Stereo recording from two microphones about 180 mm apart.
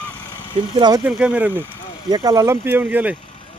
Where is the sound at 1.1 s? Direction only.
5° right (ahead or behind).